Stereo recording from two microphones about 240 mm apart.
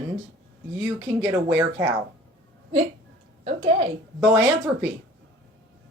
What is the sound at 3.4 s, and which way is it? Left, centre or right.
A woman's voice, right.